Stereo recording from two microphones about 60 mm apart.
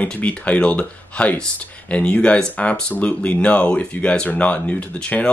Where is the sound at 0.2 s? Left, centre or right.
Left.